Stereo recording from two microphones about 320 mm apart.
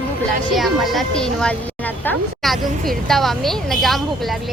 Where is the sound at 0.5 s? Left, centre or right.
Centre.